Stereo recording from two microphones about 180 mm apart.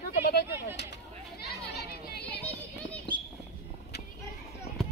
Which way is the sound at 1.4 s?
65° left (ahead or behind).